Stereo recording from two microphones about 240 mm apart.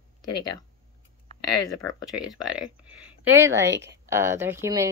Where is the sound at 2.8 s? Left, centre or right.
Centre.